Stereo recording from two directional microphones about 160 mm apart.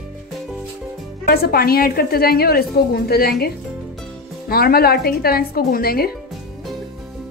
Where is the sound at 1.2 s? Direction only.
70° left (ahead or behind).